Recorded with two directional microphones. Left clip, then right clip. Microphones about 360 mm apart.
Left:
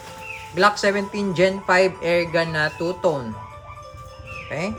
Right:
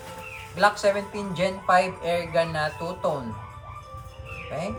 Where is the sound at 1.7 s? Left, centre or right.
Centre.